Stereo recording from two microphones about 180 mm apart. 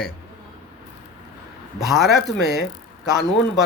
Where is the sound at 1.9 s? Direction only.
Centre (ahead or behind).